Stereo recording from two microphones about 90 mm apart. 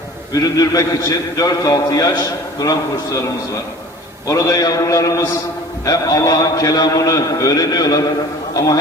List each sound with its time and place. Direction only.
0.3 s a man's voice: 40° left (ahead or behind)
4.3 s a man's voice: 40° left (ahead or behind)